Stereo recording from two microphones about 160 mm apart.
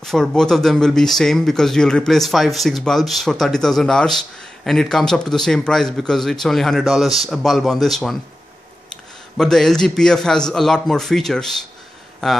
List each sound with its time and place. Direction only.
0.0 s speech: 5° left (ahead or behind)
9.4 s speech: 5° left (ahead or behind)